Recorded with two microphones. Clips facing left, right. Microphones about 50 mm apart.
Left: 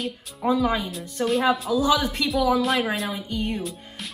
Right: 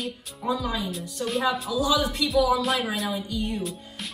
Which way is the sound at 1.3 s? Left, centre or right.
Centre.